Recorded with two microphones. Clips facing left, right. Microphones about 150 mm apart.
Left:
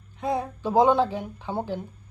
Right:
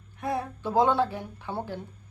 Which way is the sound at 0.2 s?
20° left (ahead or behind).